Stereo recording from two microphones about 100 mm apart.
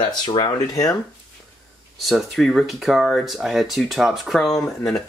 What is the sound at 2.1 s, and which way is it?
Speech, centre (ahead or behind).